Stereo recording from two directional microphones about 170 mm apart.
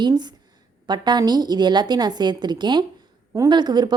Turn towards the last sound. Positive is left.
turn(degrees=-25)  # may be behind; listen again after turning